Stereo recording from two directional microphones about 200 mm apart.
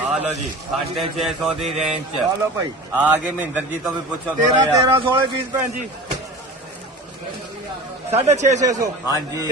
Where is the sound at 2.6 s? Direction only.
10° right (ahead or behind).